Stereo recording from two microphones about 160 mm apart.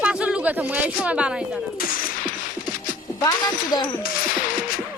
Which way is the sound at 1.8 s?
60° left (ahead or behind).